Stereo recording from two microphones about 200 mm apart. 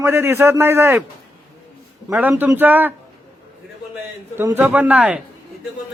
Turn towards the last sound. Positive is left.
turn(degrees=-5)  # may be behind; listen again after turning